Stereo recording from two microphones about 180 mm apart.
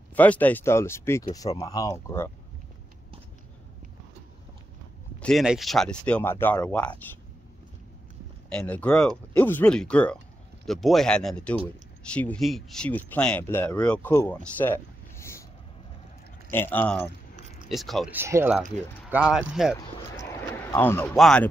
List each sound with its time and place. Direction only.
0.1 s speech: 10° left (ahead or behind)
5.2 s speech: centre (ahead or behind)
8.5 s speech: 5° left (ahead or behind)
16.4 s speech: 10° left (ahead or behind)
18.1 s speech: 15° right (ahead or behind)
20.7 s speech: 10° left (ahead or behind)